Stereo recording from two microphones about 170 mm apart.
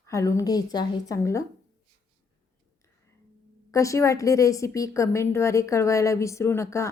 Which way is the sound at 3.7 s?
20° left (ahead or behind).